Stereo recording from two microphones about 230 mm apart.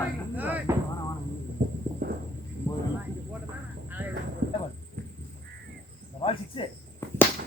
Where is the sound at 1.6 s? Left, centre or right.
Right.